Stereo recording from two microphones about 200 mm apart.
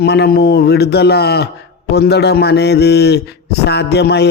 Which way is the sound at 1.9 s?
55° left (ahead or behind).